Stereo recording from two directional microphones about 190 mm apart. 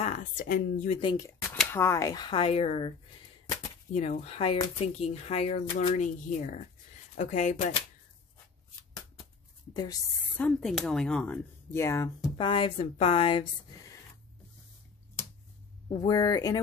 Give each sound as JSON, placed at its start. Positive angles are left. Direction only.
{"t": 0.0, "sound": "speech", "side_deg": 40}
{"t": 1.0, "sound": "speech", "side_deg": 15}
{"t": 3.9, "sound": "speech", "side_deg": 35}
{"t": 10.3, "sound": "speech", "side_deg": 5}
{"t": 12.4, "sound": "speech", "side_deg": 25}
{"t": 16.0, "sound": "speech", "side_deg": 20}